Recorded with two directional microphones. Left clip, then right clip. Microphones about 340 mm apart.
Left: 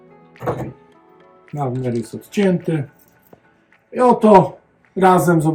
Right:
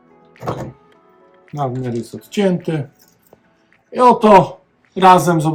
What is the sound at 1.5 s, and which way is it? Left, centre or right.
Speech, centre.